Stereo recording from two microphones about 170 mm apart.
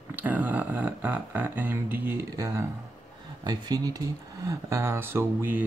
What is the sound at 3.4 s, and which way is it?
Speech, 25° right (ahead or behind).